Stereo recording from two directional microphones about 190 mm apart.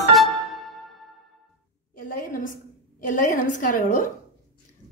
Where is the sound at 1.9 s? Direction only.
50° left (ahead or behind).